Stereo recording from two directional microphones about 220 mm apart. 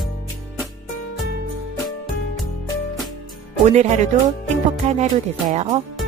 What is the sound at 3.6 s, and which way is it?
Music, 30° right (ahead or behind).